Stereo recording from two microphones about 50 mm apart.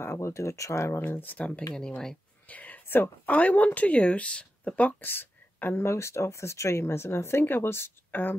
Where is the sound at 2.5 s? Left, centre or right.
Left.